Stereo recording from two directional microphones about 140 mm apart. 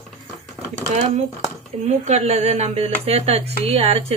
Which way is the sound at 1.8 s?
50° right (ahead or behind).